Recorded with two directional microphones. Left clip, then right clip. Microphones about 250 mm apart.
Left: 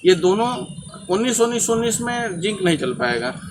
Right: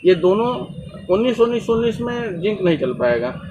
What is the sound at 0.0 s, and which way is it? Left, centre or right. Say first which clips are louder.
A man's voice: right 1 dB; left.